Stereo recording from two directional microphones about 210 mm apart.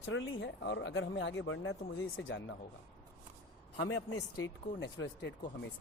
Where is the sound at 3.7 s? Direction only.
65° left (ahead or behind); by 4.5 s 90° left.